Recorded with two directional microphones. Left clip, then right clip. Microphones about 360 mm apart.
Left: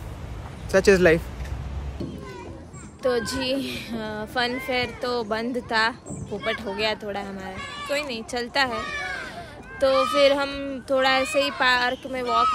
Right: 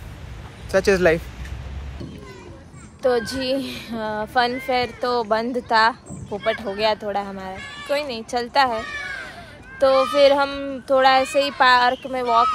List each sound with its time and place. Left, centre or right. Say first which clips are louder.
0.7 s speech: even; centre
3.0 s speech: right 4 dB; centre
7.5 s music: even; centre
7.9 s speech: right 5 dB; centre
8.7 s cat: right 1 dB; centre
9.8 s speech: right 4 dB; centre
10.1 s speech: right 4 dB; centre
12.3 s speech: right 4 dB; centre